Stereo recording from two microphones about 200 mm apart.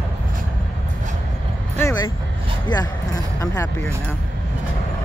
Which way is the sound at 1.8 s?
10° left (ahead or behind).